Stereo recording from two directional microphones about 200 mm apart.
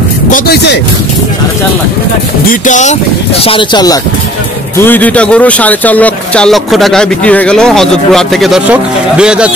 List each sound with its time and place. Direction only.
0.3 s speech: 50° left (ahead or behind)
2.6 s speech: 35° left (ahead or behind); by 4.0 s 20° left (ahead or behind)
4.7 s a man's voice: 10° left (ahead or behind)